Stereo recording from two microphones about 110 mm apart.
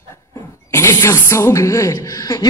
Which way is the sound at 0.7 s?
25° left (ahead or behind).